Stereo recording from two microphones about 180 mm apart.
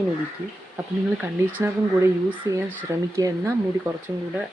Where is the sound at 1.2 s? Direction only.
10° right (ahead or behind).